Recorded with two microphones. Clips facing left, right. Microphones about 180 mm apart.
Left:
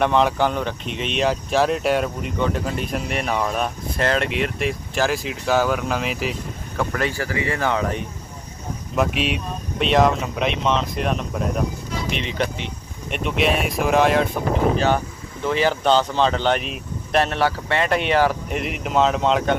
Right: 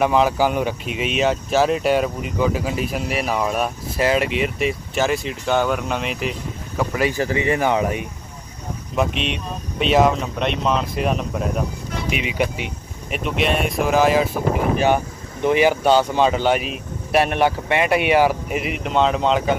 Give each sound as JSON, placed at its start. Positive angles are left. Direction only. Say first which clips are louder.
{"t": 0.0, "sound": "speech", "louder": "right 1 dB", "side_deg": -5}
{"t": 6.8, "sound": "speech", "louder": "right 3 dB", "side_deg": -10}
{"t": 7.2, "sound": "speech", "louder": "right 4 dB", "side_deg": -20}
{"t": 8.9, "sound": "speech", "louder": "left 1 dB", "side_deg": 5}
{"t": 15.4, "sound": "speech", "louder": "right 3 dB", "side_deg": -15}